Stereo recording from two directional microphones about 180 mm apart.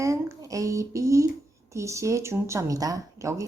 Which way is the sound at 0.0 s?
15° right (ahead or behind).